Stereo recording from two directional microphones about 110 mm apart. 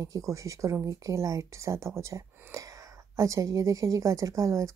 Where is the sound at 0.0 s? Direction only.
30° right (ahead or behind).